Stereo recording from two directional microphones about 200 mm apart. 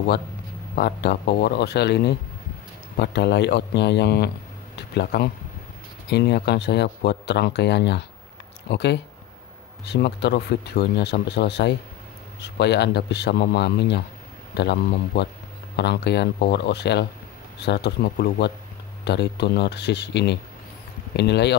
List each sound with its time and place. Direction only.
0.7 s speech: 50° left (ahead or behind)